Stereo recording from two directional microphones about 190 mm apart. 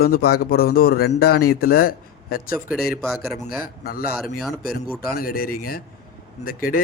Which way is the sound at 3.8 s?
50° left (ahead or behind).